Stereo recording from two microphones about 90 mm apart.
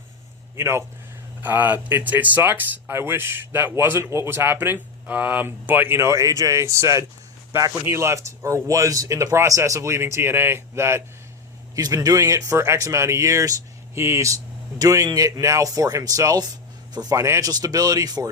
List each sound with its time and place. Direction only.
0.5 s speech: 30° right (ahead or behind)
1.4 s speech: 20° right (ahead or behind)
11.7 s speech: 40° right (ahead or behind)
17.2 s speech: 30° right (ahead or behind)
17.5 s speech: 45° right (ahead or behind)